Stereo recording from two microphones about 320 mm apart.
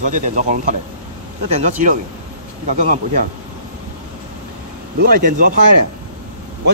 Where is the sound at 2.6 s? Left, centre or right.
Right.